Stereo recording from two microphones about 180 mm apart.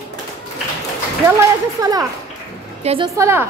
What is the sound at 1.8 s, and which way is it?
Speech, 20° right (ahead or behind).